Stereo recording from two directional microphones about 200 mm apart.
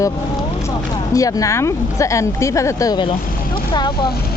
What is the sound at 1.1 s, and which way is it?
Speech, 15° left (ahead or behind).